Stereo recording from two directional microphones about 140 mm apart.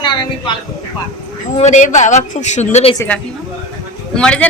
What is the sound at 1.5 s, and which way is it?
A woman's voice, 55° left (ahead or behind).